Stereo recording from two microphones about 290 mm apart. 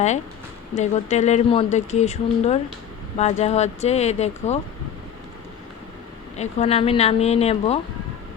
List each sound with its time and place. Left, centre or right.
0.8 s speech: left
6.3 s speech: left